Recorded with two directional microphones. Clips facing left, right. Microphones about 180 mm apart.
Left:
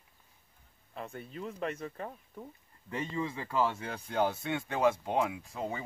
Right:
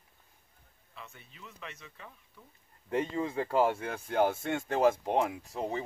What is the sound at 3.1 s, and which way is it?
Speech, 55° right (ahead or behind).